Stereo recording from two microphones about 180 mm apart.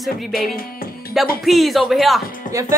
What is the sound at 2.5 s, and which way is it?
Speech, 15° right (ahead or behind).